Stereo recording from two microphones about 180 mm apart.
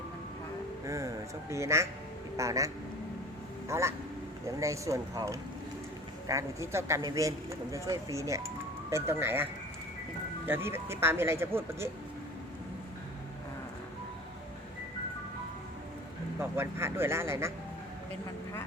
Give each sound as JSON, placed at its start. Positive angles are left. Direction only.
{"t": 0.9, "sound": "speech", "side_deg": -15}
{"t": 3.7, "sound": "speech", "side_deg": -15}
{"t": 16.4, "sound": "speech", "side_deg": -15}